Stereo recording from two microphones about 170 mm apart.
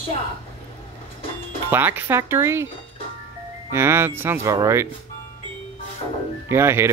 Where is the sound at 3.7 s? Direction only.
15° right (ahead or behind).